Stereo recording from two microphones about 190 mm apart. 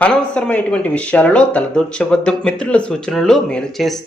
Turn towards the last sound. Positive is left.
turn(degrees=0)  # may be behind; listen again after turning